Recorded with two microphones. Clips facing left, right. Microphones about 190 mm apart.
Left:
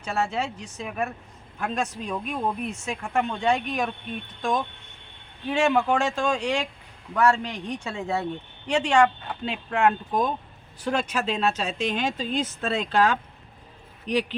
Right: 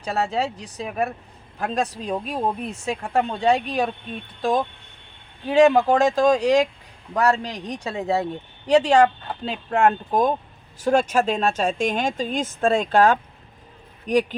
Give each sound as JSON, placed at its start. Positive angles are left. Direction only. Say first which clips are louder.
{"t": 0.0, "sound": "speech", "louder": "right 3 dB", "side_deg": -35}